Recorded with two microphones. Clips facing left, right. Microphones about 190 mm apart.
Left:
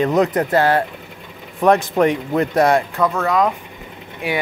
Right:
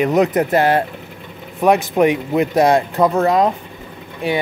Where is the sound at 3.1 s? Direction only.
30° right (ahead or behind).